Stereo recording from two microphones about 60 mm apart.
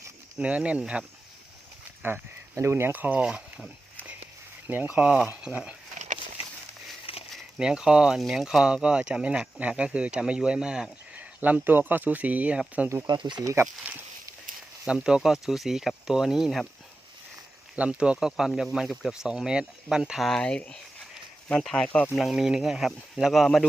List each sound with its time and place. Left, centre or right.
0.3 s speech: centre
2.0 s speech: right
2.6 s speech: right
2.9 s speech: right
3.2 s speech: centre
4.9 s speech: right
7.6 s speech: centre
11.2 s speech: right
12.9 s speech: right
14.9 s speech: centre
17.7 s speech: centre
20.4 s speech: centre
22.1 s speech: centre